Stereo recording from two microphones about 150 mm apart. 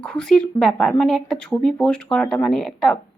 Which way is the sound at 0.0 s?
5° left (ahead or behind).